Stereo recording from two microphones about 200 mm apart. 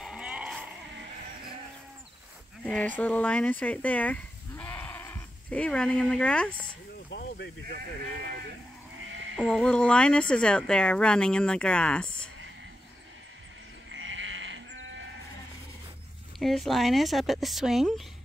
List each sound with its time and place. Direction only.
0.0 s a sound: 5° right (ahead or behind)
2.6 s speech: 5° left (ahead or behind)
7.2 s a sound: 50° left (ahead or behind)
9.0 s sheep: 75° right (ahead or behind)
9.4 s speech: centre (ahead or behind)
13.9 s sheep: 70° right (ahead or behind)
16.3 s speech: centre (ahead or behind)